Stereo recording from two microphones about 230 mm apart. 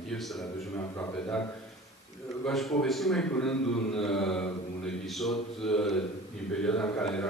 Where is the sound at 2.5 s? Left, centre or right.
Centre.